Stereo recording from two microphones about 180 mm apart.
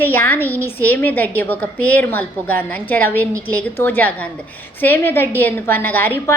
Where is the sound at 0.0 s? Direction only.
10° left (ahead or behind).